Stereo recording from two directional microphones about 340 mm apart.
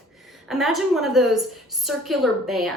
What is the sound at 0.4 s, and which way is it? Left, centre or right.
A woman's voice, centre.